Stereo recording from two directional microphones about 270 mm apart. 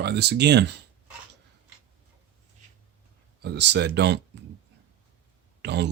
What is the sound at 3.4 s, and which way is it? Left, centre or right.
Speech, right.